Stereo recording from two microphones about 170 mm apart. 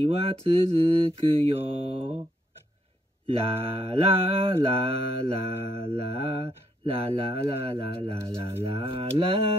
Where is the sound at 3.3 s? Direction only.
35° right (ahead or behind).